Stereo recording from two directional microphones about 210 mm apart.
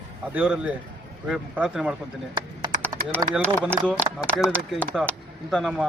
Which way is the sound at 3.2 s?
15° right (ahead or behind).